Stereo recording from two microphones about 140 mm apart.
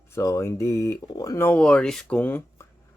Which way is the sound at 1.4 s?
10° left (ahead or behind).